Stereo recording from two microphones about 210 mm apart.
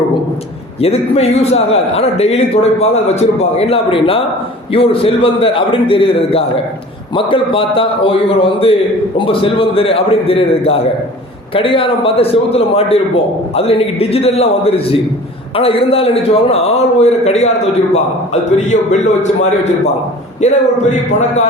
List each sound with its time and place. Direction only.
0.8 s a man's voice: 30° left (ahead or behind)
18.5 s a man's voice: 35° left (ahead or behind)